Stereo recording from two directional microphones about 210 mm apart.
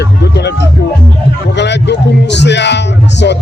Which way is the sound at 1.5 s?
55° left (ahead or behind).